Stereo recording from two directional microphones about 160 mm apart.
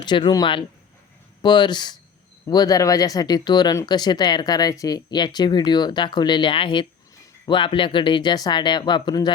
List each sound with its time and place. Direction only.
0.0 s speech: 30° left (ahead or behind)